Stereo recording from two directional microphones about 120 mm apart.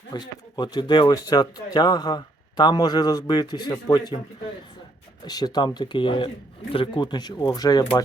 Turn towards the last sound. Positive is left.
turn(degrees=35)  # may be behind; listen again after turning